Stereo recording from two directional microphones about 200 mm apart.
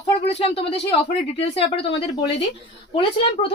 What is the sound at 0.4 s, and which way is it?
A woman's voice, 30° left (ahead or behind).